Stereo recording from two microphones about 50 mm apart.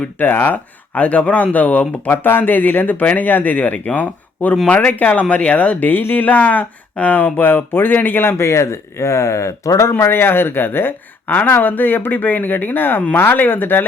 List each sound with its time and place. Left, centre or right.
0.2 s speech: left
2.0 s speech: left
5.9 s speech: left
6.2 s speech: left
8.4 s speech: left
10.0 s speech: left